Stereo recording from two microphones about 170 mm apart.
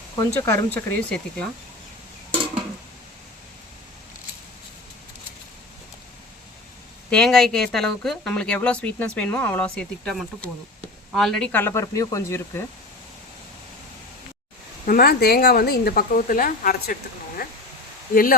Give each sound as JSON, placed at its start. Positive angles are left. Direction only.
{"t": 0.3, "sound": "speech", "side_deg": 15}
{"t": 7.1, "sound": "speech", "side_deg": 5}
{"t": 14.8, "sound": "speech", "side_deg": 65}